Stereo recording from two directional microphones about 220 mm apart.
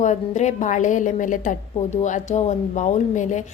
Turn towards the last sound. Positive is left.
turn(degrees=35)  # may be behind; listen again after turning